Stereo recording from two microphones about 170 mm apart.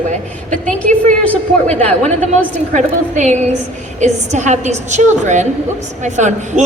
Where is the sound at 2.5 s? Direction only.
45° right (ahead or behind).